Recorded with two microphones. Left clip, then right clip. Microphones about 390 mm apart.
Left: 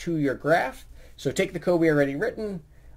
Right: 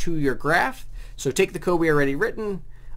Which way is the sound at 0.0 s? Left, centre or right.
Right.